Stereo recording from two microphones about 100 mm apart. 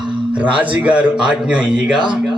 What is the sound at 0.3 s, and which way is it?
A man's voice, 15° right (ahead or behind).